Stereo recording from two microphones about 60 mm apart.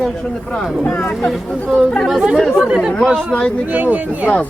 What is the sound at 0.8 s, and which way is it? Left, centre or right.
Speech, centre.